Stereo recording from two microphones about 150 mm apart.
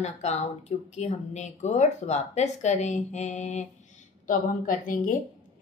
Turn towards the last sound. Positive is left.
turn(degrees=65)  # may be behind; listen again after turning